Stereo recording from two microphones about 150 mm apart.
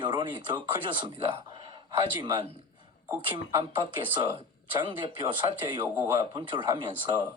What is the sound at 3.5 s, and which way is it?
Speech, 30° right (ahead or behind).